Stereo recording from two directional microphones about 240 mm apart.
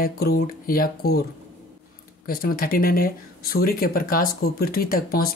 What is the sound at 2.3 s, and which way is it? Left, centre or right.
Speech, left.